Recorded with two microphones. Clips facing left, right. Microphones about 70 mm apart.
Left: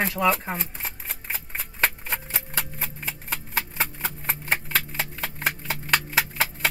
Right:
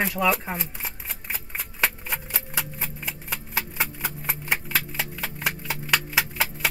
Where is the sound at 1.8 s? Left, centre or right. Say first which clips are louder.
Left 1 dB; left.